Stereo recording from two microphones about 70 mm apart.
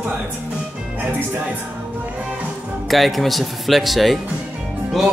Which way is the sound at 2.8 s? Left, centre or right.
Centre.